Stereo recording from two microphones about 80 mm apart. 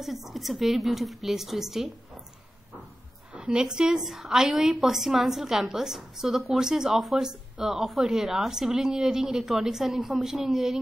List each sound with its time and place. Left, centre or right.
0.0 s a woman's voice: centre
3.3 s a woman's voice: centre